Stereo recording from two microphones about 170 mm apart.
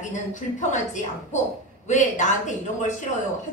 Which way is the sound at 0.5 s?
45° left (ahead or behind).